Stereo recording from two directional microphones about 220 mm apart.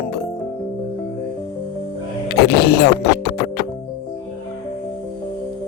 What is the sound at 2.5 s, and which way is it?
Speech, 45° left (ahead or behind).